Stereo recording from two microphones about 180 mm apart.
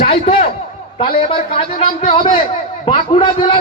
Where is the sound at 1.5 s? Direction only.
35° left (ahead or behind).